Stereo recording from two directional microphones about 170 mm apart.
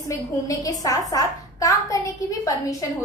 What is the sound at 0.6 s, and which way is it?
A woman's voice, 20° left (ahead or behind).